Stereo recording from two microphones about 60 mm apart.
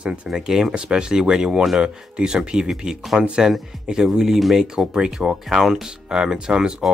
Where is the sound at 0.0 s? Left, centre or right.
Centre.